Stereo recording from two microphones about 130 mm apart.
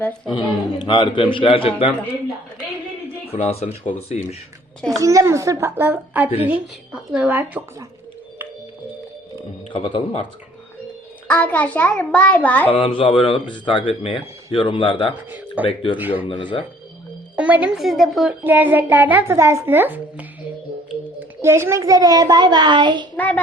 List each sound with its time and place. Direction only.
0.3 s a man's voice: 40° left (ahead or behind)
3.3 s a man's voice: 50° left (ahead or behind)
4.9 s a child's voice: 25° right (ahead or behind)
9.7 s a man's voice: 40° left (ahead or behind)
11.3 s a child's voice: 10° left (ahead or behind)
12.6 s a man's voice: 45° left (ahead or behind)
16.0 s a woman's voice: 15° right (ahead or behind)
16.2 s a man's voice: 40° left (ahead or behind)
17.3 s a woman's voice: 10° right (ahead or behind)
18.3 s a woman's voice: 15° right (ahead or behind); by 23.0 s 35° right (ahead or behind)
23.1 s a child's voice: 15° left (ahead or behind)